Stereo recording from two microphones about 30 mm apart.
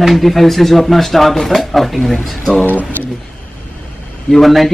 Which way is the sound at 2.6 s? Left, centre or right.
Left.